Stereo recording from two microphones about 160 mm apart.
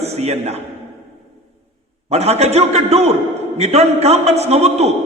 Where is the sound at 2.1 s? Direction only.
40° right (ahead or behind).